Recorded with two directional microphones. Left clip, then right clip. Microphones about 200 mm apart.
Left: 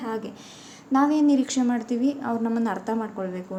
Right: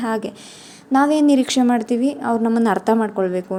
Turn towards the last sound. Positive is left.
turn(degrees=-45)  # may be behind; listen again after turning